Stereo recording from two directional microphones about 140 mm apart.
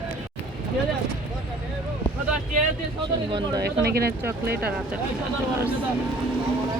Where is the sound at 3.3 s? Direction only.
25° right (ahead or behind).